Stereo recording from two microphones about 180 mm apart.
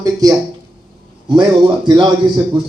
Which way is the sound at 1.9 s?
25° right (ahead or behind).